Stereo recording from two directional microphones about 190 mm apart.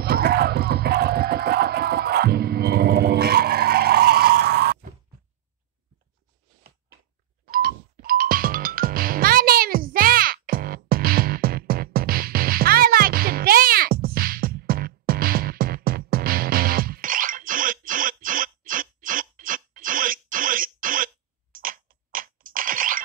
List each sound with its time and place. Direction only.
0.0 s music: 55° right (ahead or behind)
7.4 s music: 50° right (ahead or behind)